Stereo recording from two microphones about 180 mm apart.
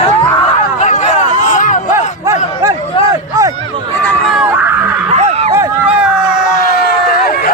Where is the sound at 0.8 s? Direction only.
40° left (ahead or behind).